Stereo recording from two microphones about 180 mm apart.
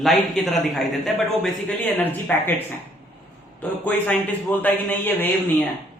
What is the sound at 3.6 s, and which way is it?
Speech, 10° left (ahead or behind).